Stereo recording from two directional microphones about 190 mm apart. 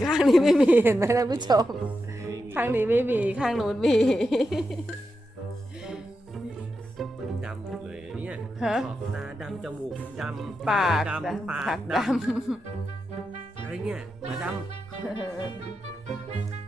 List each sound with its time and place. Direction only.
0.0 s a woman's voice: centre (ahead or behind); by 1.6 s 20° right (ahead or behind)
2.2 s music: 15° right (ahead or behind)
7.0 s music: centre (ahead or behind)
13.7 s speech: 5° right (ahead or behind)
15.1 s music: 25° left (ahead or behind)